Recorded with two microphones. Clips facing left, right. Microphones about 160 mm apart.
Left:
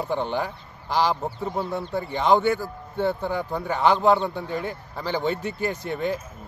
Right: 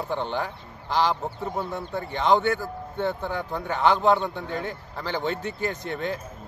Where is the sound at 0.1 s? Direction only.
15° left (ahead or behind).